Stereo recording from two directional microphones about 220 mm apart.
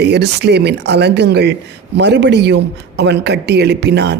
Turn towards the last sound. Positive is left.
turn(degrees=-50)  # may be behind; listen again after turning